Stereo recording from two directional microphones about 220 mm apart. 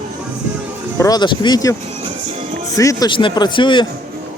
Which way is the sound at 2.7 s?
15° left (ahead or behind).